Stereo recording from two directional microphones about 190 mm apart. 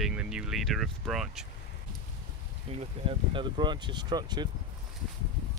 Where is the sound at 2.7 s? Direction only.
30° right (ahead or behind).